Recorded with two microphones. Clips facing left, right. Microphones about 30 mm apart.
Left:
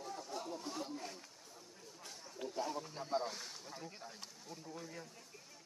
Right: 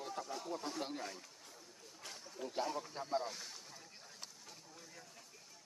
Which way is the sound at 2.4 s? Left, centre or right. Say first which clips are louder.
Left 1 dB; left.